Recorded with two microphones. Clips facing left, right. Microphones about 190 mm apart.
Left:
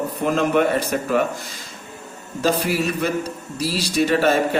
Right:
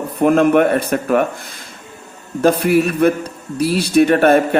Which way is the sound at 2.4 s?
55° right (ahead or behind).